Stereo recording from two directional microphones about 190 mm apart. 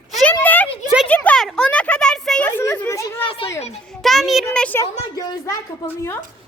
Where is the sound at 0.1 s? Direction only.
5° left (ahead or behind).